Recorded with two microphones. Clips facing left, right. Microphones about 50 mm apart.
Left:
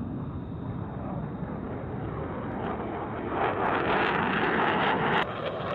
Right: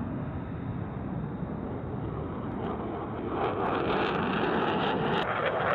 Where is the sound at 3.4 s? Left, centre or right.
Centre.